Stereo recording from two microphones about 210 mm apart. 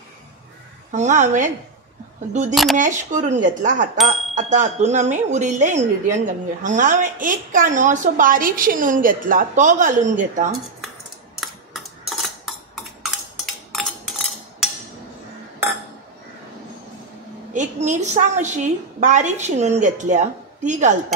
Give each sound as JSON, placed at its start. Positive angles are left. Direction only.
{"t": 0.9, "sound": "speech", "side_deg": -35}
{"t": 2.5, "sound": "speech", "side_deg": 0}
{"t": 2.8, "sound": "speech", "side_deg": -35}
{"t": 11.3, "sound": "tick-tock", "side_deg": 0}
{"t": 17.5, "sound": "a woman's voice", "side_deg": -35}